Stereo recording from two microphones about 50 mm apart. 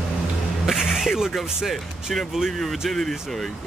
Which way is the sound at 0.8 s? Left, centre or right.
Centre.